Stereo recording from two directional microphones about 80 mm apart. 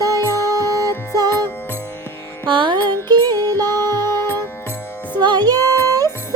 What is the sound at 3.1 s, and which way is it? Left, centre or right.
Music, right.